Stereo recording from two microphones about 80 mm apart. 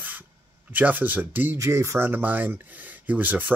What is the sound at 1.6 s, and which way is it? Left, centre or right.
Speech, right.